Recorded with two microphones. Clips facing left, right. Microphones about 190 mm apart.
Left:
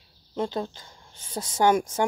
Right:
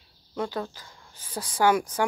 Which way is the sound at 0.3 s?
25° left (ahead or behind).